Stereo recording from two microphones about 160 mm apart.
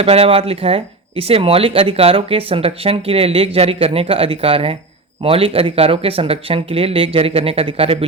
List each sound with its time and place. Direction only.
0.0 s speech: 35° right (ahead or behind)